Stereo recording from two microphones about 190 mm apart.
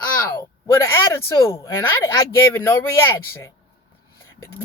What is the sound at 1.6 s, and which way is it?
Speech, 10° left (ahead or behind).